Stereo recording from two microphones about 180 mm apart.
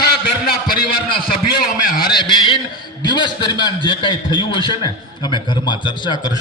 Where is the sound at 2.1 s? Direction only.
25° left (ahead or behind).